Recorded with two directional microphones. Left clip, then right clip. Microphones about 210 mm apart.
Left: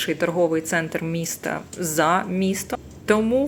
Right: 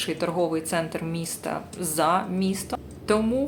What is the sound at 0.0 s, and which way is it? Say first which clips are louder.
Speech: left 4 dB; 10° left (ahead or behind).